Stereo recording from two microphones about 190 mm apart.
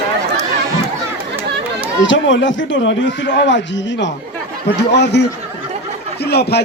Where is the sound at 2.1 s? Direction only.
75° left (ahead or behind); by 6.6 s 60° left (ahead or behind).